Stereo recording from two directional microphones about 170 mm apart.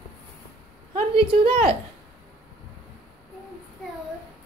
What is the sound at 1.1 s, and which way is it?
Speech, 30° right (ahead or behind).